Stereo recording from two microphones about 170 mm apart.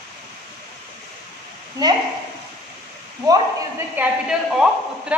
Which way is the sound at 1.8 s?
25° right (ahead or behind).